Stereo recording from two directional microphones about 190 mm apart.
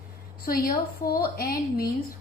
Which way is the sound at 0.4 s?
50° left (ahead or behind).